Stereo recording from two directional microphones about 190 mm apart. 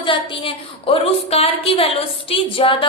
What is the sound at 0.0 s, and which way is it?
A woman's voice, 30° left (ahead or behind).